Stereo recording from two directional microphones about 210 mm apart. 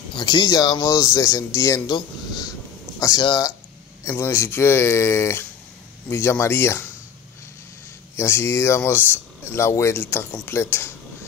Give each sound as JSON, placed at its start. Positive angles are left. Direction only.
{"t": 0.1, "sound": "speech", "side_deg": 20}
{"t": 8.2, "sound": "speech", "side_deg": 10}